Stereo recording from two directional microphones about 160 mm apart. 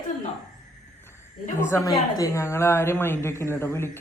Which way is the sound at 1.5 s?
15° left (ahead or behind).